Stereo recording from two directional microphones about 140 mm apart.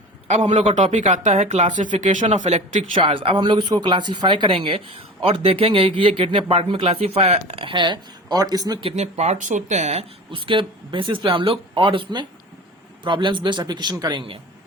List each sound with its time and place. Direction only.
0.6 s speech: 55° right (ahead or behind)
2.9 s speech: 40° right (ahead or behind)
7.6 s speech: 35° right (ahead or behind)
8.8 s speech: 50° right (ahead or behind)